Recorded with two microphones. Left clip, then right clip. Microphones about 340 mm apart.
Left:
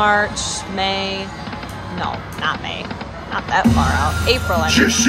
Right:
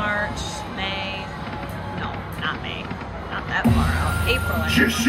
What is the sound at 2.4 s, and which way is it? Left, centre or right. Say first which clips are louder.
Speech: left 6 dB; centre.